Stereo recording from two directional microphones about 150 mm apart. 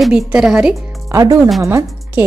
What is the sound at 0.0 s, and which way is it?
Speech, 5° right (ahead or behind).